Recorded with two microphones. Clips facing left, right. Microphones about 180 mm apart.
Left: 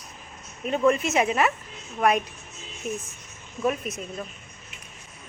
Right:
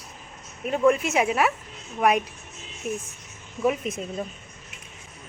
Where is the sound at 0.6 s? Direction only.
5° right (ahead or behind); by 4.0 s 20° right (ahead or behind).